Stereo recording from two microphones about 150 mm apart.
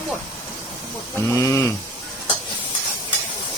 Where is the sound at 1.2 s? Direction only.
20° left (ahead or behind).